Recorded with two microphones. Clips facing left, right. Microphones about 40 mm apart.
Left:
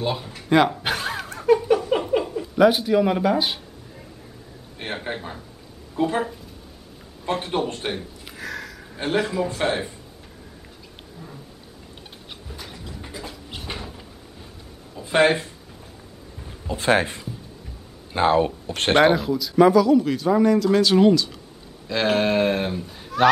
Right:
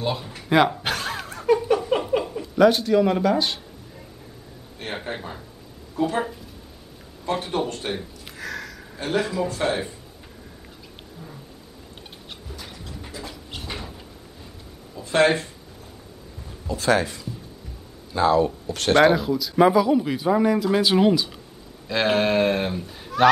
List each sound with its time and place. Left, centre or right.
0.0 s a man's voice: centre
0.8 s a sound: centre
4.8 s a man's voice: left
5.9 s speech: centre
7.5 s a man's voice: left
7.9 s a sound: centre
8.9 s a man's voice: left
12.8 s a sound: centre
15.0 s speech: centre
16.4 s a man's voice: left
19.1 s a man's voice: centre
19.6 s speech: centre
21.8 s a man's voice: centre